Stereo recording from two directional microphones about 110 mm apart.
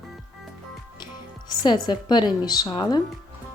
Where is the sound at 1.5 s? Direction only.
40° left (ahead or behind).